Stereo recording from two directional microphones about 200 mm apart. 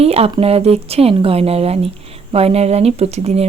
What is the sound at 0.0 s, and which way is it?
Speech, 30° right (ahead or behind).